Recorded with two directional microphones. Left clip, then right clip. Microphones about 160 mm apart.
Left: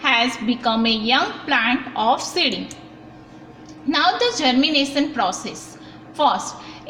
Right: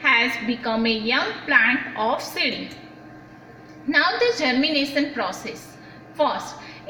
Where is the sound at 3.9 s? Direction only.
50° left (ahead or behind).